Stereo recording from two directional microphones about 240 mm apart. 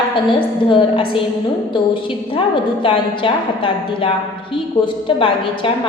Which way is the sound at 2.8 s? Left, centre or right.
Left.